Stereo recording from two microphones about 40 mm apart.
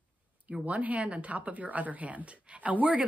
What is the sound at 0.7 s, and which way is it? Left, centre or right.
A woman's voice, right.